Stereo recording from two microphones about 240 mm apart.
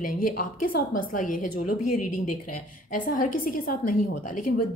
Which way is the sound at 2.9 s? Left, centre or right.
Left.